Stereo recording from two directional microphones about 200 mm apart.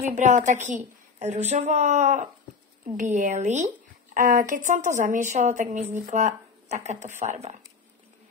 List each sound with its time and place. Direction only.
0.1 s speech: 35° right (ahead or behind)